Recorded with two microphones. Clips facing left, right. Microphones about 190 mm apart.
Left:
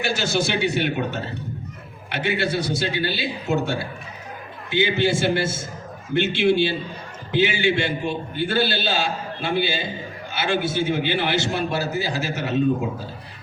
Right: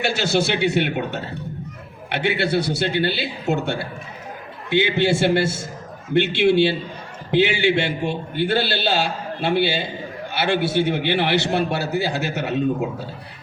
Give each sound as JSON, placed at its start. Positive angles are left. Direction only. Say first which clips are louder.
{"t": 0.0, "sound": "a man's voice", "louder": "right 2 dB", "side_deg": -60}